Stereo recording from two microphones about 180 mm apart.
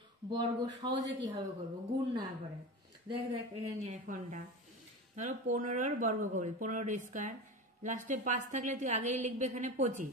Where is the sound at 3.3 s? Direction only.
35° right (ahead or behind).